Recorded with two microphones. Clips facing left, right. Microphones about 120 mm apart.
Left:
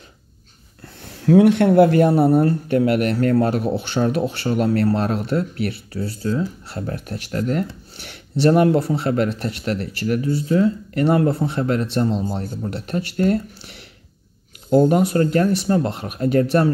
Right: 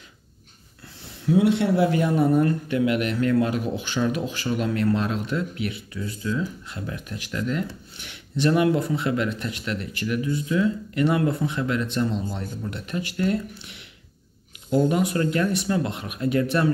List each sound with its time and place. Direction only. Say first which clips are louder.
1.0 s speech: left 7 dB; 65° left (ahead or behind); by 2.0 s 50° left (ahead or behind)
2.0 s speech: left 5 dB; 35° left (ahead or behind)